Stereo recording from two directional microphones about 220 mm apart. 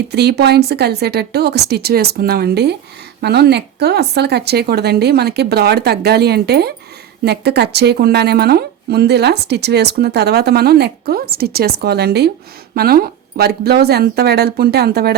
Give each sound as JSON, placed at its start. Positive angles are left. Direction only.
{"t": 0.1, "sound": "speech", "side_deg": -50}